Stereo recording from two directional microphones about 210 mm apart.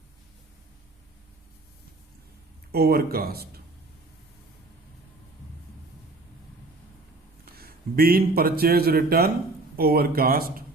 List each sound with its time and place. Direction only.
2.7 s speech: 45° right (ahead or behind)
7.4 s a man's voice: 45° right (ahead or behind)